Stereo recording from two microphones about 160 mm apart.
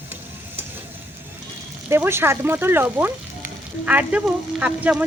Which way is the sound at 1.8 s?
15° right (ahead or behind).